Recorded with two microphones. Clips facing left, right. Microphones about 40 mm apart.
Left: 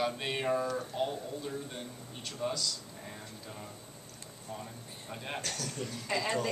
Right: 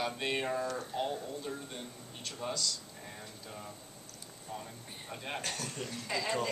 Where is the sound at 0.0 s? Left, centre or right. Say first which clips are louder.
Left 1 dB; centre.